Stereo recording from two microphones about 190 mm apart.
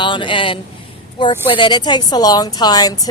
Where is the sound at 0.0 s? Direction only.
25° left (ahead or behind).